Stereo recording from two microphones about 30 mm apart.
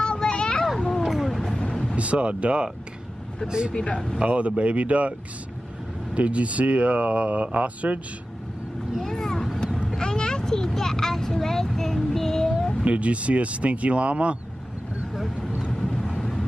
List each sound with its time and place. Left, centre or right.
0.2 s a sound: left
0.7 s a sound: centre
1.2 s vehicle: centre
2.0 s speech: right
3.4 s speech: right
3.7 s speech: left
4.2 s speech: right
6.1 s speech: right
9.0 s vehicle: centre
9.9 s a sound: left
10.7 s child singing: centre
12.8 s speech: right
16.2 s vehicle: centre